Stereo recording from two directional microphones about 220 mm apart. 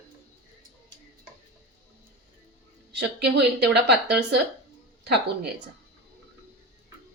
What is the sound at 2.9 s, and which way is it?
Speech, 50° right (ahead or behind).